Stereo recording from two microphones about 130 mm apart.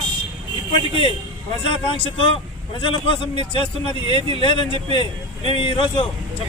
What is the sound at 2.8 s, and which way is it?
A man's voice, 40° left (ahead or behind).